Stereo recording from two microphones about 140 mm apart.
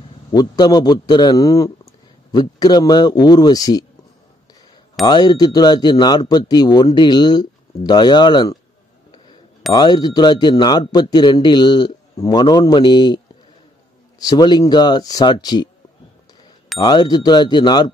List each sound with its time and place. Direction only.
0.3 s a man's voice: 30° left (ahead or behind)
5.0 s a man's voice: 30° left (ahead or behind)
9.7 s a man's voice: 30° left (ahead or behind)
14.2 s a man's voice: 30° left (ahead or behind)
16.7 s speech: 30° left (ahead or behind)